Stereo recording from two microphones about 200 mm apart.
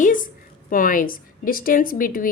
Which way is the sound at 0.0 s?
40° left (ahead or behind).